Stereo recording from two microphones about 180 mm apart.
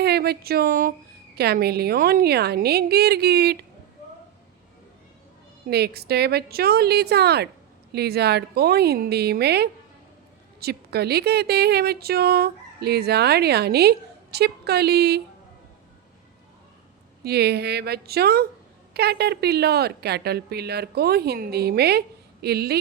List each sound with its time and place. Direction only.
0.0 s speech: 60° right (ahead or behind)
1.4 s a woman's voice: 60° right (ahead or behind)
5.6 s a woman's voice: 65° right (ahead or behind)
17.2 s a woman's voice: 65° right (ahead or behind)